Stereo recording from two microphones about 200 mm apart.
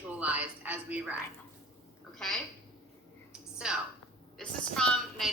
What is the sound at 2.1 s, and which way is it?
Speech, 5° left (ahead or behind).